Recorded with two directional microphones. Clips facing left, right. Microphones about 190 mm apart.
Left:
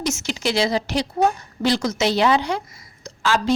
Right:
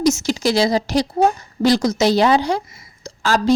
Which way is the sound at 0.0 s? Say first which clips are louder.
Right 7 dB; 35° right (ahead or behind).